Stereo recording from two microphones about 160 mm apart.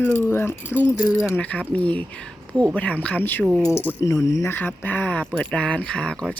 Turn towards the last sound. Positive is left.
turn(degrees=5)  # may be behind; listen again after turning